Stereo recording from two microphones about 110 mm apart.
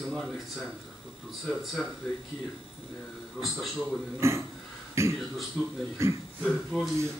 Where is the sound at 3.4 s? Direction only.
Centre (ahead or behind).